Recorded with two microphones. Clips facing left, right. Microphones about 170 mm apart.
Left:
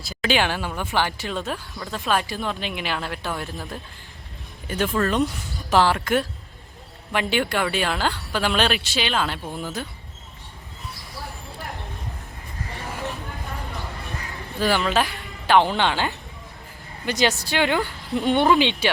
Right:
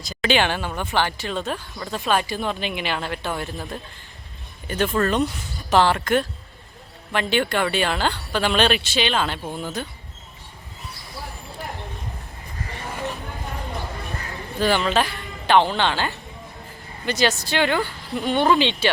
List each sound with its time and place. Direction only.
0.1 s speech: 5° left (ahead or behind)
14.6 s speech: 5° left (ahead or behind)